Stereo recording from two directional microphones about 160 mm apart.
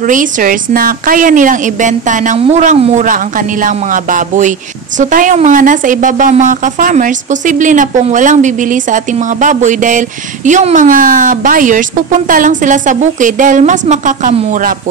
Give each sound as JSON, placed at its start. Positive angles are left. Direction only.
{"t": 0.0, "sound": "a woman's voice", "side_deg": -55}
{"t": 14.5, "sound": "speech", "side_deg": -60}